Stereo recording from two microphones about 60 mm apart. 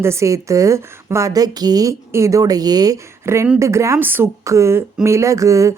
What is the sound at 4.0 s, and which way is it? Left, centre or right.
Speech, right.